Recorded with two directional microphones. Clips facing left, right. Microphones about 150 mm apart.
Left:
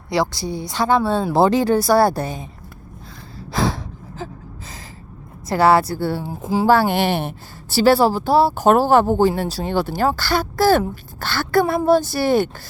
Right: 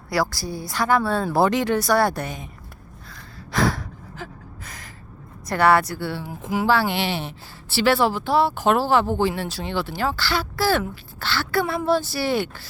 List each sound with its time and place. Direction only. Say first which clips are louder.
0.1 s a woman's voice: left 3 dB; 20° left (ahead or behind)
3.3 s gasp: left 1 dB; 25° left (ahead or behind)
5.5 s a woman's voice: left 3 dB; 30° left (ahead or behind)
5.9 s speech: left 6 dB; 40° left (ahead or behind)
6.2 s speech: left 4 dB; 30° left (ahead or behind)
6.7 s a woman's voice: left 6 dB; 45° left (ahead or behind)